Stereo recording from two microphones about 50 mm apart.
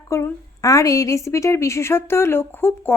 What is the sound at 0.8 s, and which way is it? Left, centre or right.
A woman's voice, left.